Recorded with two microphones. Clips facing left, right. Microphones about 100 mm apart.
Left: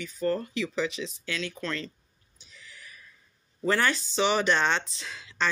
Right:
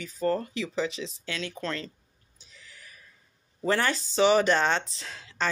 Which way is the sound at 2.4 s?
40° right (ahead or behind).